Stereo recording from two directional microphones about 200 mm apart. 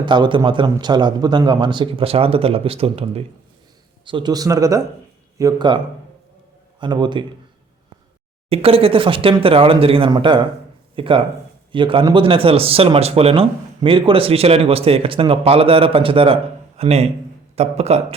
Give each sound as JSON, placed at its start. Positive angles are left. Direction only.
{"t": 0.0, "sound": "speech", "side_deg": -25}
{"t": 8.4, "sound": "speech", "side_deg": -30}